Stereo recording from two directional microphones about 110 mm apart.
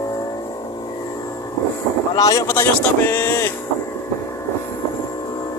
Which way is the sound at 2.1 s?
30° left (ahead or behind).